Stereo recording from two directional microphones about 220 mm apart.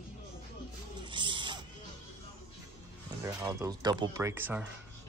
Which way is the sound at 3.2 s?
15° right (ahead or behind).